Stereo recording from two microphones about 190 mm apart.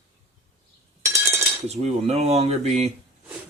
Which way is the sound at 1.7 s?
35° right (ahead or behind).